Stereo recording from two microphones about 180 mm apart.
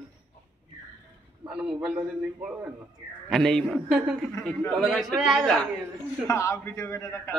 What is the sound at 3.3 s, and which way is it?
A man's voice, centre (ahead or behind).